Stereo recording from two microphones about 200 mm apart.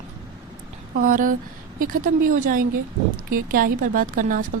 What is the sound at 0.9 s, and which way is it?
Speech, 40° right (ahead or behind).